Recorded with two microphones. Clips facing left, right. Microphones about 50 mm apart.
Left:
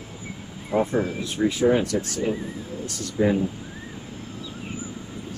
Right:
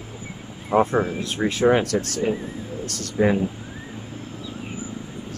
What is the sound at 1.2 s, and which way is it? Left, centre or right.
Speech, right.